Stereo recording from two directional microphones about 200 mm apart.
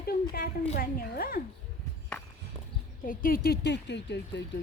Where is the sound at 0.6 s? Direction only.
40° left (ahead or behind).